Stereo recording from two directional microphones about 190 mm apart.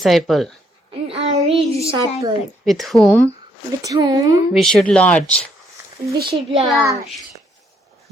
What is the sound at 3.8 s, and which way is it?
Speech, 20° right (ahead or behind).